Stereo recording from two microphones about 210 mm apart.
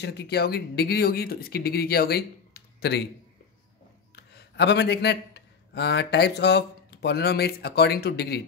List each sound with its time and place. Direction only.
0.0 s speech: 50° left (ahead or behind)
4.1 s speech: 55° left (ahead or behind)